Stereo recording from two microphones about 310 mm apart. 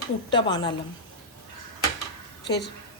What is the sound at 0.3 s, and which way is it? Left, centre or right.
Speech, centre.